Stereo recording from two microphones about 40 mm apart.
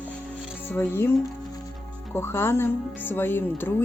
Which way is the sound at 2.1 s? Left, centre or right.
Left.